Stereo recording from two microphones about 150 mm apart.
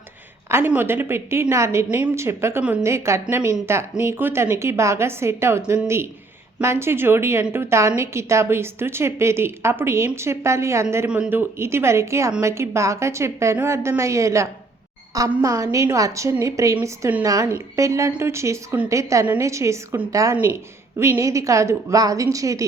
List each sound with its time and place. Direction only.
0.4 s a woman's voice: 10° right (ahead or behind)